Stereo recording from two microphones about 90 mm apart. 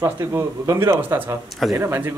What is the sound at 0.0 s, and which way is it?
A man's voice, 30° right (ahead or behind).